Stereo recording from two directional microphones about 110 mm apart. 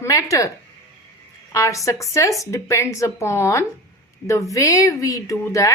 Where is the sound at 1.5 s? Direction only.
30° left (ahead or behind).